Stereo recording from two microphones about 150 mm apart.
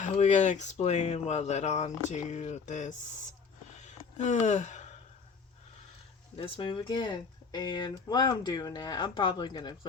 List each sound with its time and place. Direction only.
0.0 s speech: 50° left (ahead or behind)
3.8 s a sound: 50° left (ahead or behind)
6.3 s speech: 35° left (ahead or behind)